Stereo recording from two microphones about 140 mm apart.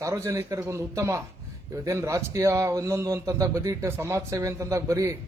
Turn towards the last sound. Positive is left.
turn(degrees=-20)  # may be behind; listen again after turning